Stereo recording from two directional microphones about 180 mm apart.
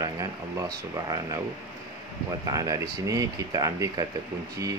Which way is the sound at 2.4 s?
20° right (ahead or behind).